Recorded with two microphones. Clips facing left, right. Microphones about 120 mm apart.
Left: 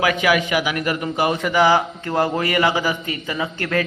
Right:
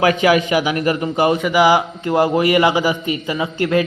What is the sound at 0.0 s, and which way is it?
A man's voice, 30° right (ahead or behind).